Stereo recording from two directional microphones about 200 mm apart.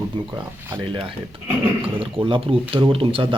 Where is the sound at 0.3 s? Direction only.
20° right (ahead or behind).